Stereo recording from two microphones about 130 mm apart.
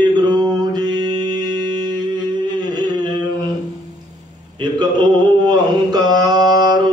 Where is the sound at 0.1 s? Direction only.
30° right (ahead or behind).